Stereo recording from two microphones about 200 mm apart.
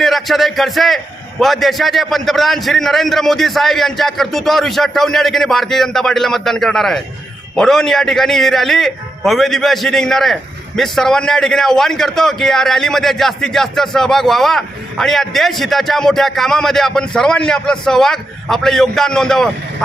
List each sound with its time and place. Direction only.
0.0 s a man's voice: centre (ahead or behind)